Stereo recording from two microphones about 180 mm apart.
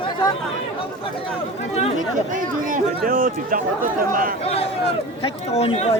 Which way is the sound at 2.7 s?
50° right (ahead or behind).